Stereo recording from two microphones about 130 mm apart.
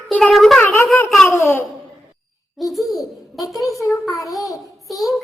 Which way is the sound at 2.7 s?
Centre (ahead or behind).